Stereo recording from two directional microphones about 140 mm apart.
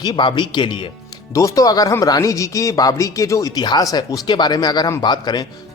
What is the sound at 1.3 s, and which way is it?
Speech, 25° left (ahead or behind).